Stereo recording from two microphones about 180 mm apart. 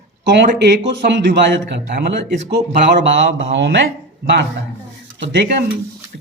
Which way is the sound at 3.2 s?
90° right.